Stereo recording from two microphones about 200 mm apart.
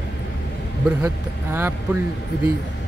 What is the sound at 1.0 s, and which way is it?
Speech, 10° right (ahead or behind).